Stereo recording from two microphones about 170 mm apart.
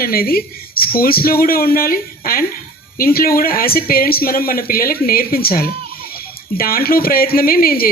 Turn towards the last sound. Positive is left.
turn(degrees=60)  # may be behind; listen again after turning